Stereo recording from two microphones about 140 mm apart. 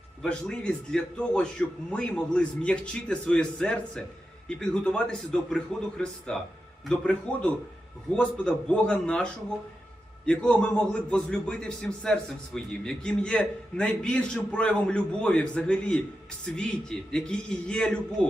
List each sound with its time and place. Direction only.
0.2 s a man's voice: 5° left (ahead or behind)